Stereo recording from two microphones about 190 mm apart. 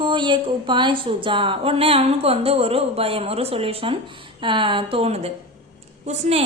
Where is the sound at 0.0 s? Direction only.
25° right (ahead or behind).